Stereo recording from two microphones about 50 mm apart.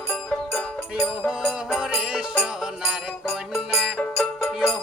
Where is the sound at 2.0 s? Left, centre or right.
Right.